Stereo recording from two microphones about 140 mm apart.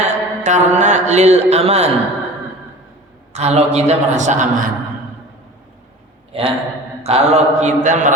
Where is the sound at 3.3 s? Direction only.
50° right (ahead or behind).